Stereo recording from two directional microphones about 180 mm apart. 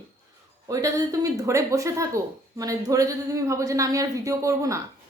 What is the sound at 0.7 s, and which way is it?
A woman's voice, 20° right (ahead or behind).